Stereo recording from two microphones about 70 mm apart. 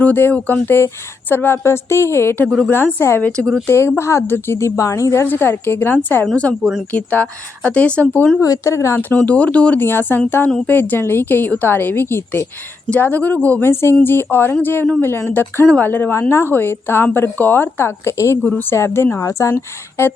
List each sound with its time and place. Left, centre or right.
0.0 s a woman's voice: left
3.2 s a woman's voice: centre
3.7 s speech: left
5.2 s speech: left
6.3 s a woman's voice: centre
8.4 s speech: left
9.0 s a woman's voice: left
9.8 s a woman's voice: left
18.4 s a woman's voice: left
19.1 s speech: left